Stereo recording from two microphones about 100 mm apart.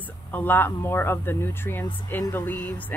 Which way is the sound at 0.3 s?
20° left (ahead or behind).